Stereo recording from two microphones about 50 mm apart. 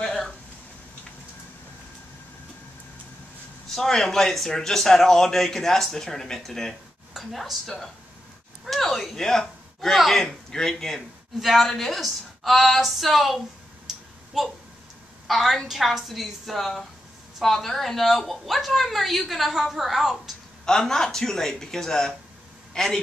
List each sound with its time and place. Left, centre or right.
0.0 s a sound: centre
3.7 s a man's voice: centre
11.3 s a woman's voice: centre
13.8 s a sound: centre
15.2 s a woman's voice: centre
20.6 s a man's voice: centre